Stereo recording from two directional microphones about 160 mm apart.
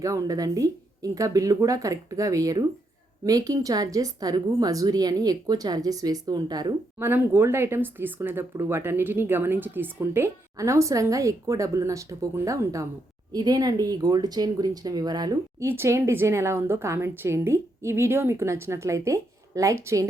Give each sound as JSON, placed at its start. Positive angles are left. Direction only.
{"t": 0.0, "sound": "speech", "side_deg": -20}
{"t": 7.1, "sound": "speech", "side_deg": -15}